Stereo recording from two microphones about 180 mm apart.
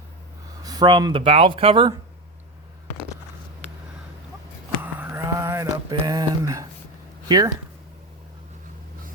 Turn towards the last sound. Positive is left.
turn(degrees=-20)  # may be behind; listen again after turning